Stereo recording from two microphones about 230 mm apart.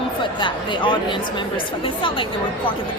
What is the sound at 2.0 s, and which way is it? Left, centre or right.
Speech, left.